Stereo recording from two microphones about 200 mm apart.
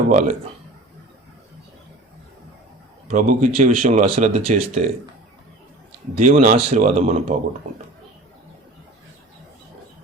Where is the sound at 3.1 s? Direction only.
40° right (ahead or behind).